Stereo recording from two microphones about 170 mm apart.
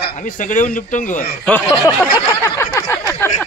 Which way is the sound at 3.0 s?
10° left (ahead or behind).